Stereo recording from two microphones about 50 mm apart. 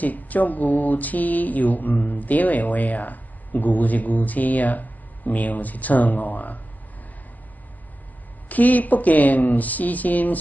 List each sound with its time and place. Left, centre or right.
0.0 s speech: left
8.5 s speech: left